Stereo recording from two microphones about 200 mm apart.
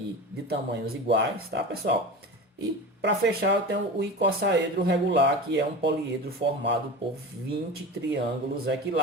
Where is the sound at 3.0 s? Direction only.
60° right (ahead or behind).